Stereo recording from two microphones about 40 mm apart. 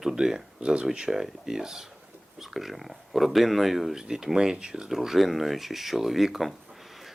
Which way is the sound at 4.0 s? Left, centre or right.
Centre.